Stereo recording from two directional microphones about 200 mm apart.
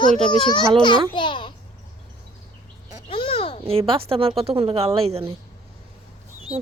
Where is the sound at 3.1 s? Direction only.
25° left (ahead or behind).